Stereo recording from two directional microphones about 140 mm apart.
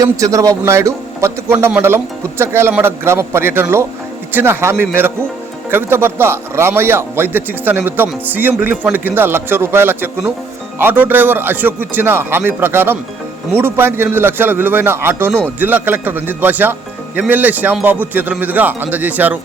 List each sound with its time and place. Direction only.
0.0 s a man's voice: 25° right (ahead or behind)